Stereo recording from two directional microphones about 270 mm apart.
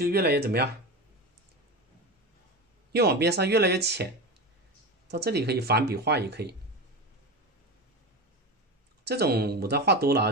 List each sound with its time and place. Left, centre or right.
0.0 s speech: right
2.9 s speech: right
5.1 s speech: right
9.0 s speech: right